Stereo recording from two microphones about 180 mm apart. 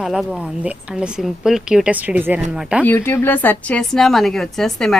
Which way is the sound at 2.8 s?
10° left (ahead or behind).